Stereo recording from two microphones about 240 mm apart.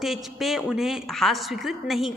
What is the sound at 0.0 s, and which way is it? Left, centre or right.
A woman's voice, centre.